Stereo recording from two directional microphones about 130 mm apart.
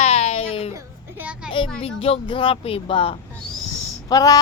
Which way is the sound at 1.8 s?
50° left (ahead or behind).